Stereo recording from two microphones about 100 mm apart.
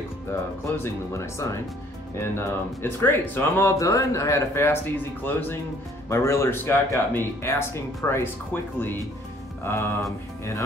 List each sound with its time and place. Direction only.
0.7 s speech: 30° left (ahead or behind)
9.6 s music: 25° left (ahead or behind)